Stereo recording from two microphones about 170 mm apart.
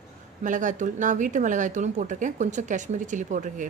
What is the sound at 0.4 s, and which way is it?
Speech, 50° right (ahead or behind).